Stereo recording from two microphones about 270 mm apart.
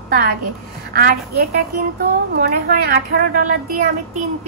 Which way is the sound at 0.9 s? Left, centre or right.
Right.